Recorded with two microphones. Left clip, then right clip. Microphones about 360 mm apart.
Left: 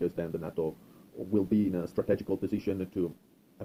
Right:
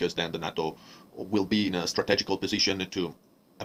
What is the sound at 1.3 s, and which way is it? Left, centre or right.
Speech, right.